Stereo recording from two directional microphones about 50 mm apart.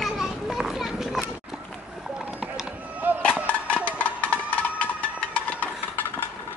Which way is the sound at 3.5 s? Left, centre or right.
Left.